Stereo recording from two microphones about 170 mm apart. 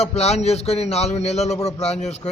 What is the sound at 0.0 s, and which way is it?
A man's voice, 40° left (ahead or behind).